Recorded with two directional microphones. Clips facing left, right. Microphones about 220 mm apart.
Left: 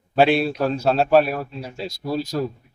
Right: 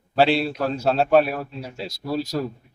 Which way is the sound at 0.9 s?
Centre (ahead or behind).